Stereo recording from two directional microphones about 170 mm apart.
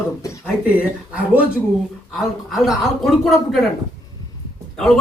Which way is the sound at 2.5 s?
Centre (ahead or behind).